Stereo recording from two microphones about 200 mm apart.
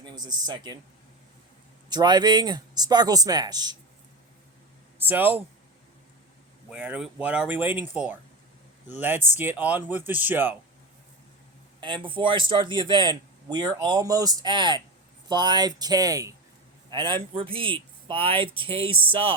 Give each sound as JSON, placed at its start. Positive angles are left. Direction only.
{"t": 0.4, "sound": "a man's voice", "side_deg": -20}
{"t": 1.9, "sound": "a man's voice", "side_deg": -20}
{"t": 4.9, "sound": "speech", "side_deg": -10}
{"t": 6.7, "sound": "speech", "side_deg": -5}
{"t": 11.8, "sound": "a man's voice", "side_deg": -25}